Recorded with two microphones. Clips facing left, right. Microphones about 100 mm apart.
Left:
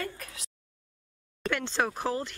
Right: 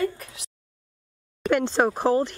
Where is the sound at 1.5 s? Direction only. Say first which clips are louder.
Right 8 dB; 45° right (ahead or behind).